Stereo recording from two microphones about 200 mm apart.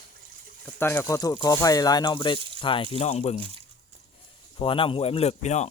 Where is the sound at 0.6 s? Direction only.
10° left (ahead or behind); by 3.4 s 35° left (ahead or behind).